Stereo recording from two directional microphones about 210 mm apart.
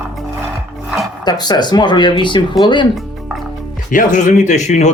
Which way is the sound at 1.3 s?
20° left (ahead or behind).